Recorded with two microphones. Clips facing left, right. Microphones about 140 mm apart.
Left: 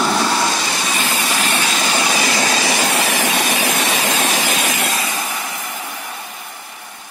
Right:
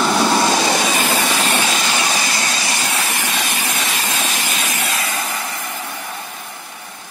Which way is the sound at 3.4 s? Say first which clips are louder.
Left 4 dB; 80° left.